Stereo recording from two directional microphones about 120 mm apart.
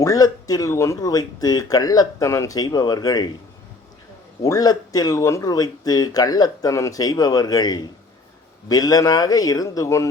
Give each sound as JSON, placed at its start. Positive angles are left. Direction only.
{"t": 0.0, "sound": "speech", "side_deg": 30}
{"t": 4.4, "sound": "speech", "side_deg": 30}